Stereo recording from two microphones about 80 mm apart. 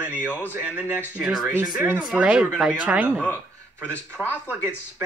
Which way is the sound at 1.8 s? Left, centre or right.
Right.